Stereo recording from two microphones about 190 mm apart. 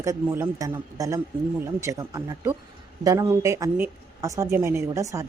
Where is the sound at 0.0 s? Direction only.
15° right (ahead or behind).